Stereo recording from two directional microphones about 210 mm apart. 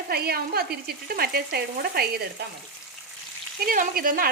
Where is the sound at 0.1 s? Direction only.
45° right (ahead or behind).